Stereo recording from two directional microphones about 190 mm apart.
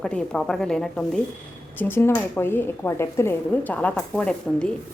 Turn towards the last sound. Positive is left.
turn(degrees=5)  # may be behind; listen again after turning